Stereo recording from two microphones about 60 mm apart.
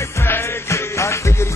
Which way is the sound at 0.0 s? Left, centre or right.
Left.